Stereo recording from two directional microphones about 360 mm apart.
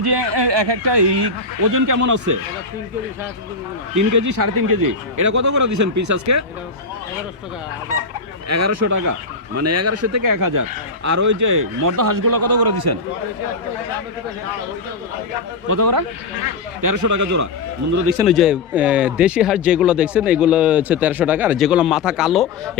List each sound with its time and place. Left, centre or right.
0.0 s speech: right
3.9 s speech: right
8.4 s speech: right
9.6 s speech: right
10.2 s speech: right
15.6 s speech: right
16.8 s speech: right
18.2 s speech: centre